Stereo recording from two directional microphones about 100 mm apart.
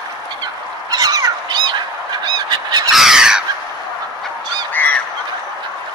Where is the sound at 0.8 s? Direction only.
40° right (ahead or behind).